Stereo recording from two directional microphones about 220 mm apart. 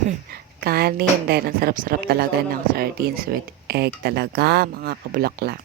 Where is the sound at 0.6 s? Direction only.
45° right (ahead or behind).